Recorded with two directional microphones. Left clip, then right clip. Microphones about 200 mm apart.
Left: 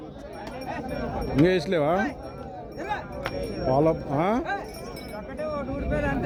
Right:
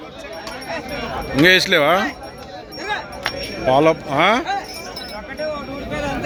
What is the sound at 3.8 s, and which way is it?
Speech, centre (ahead or behind).